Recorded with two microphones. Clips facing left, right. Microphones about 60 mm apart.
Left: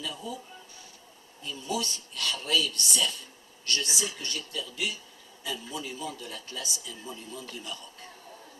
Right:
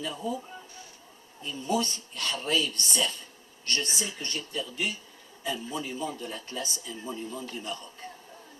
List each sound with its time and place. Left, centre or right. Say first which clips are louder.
0.0 s speech: right 4 dB; right
1.5 s speech: right 4 dB; right